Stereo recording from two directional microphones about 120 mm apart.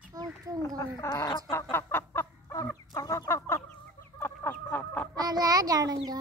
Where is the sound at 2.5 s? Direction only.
25° left (ahead or behind).